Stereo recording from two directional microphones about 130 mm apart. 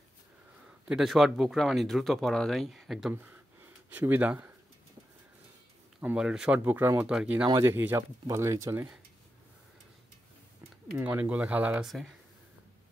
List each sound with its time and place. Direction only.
0.8 s speech: 5° right (ahead or behind)
5.9 s speech: 5° right (ahead or behind)
7.4 s speech: 25° right (ahead or behind)
11.0 s speech: 15° right (ahead or behind)